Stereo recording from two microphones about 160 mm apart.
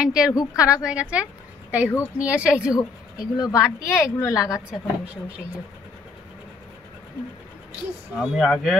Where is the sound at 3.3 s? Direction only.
25° left (ahead or behind).